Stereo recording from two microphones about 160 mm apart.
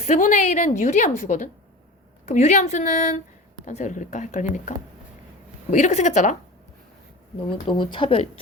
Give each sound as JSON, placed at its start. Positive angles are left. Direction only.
{"t": 0.0, "sound": "speech", "side_deg": 50}
{"t": 5.7, "sound": "speech", "side_deg": 45}
{"t": 7.7, "sound": "speech", "side_deg": 30}